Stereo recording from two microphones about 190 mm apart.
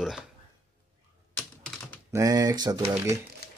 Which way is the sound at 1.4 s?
Centre (ahead or behind).